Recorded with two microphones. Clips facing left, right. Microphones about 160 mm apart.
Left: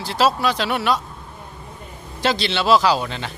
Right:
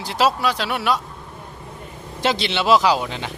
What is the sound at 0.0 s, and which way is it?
Speech, 15° right (ahead or behind).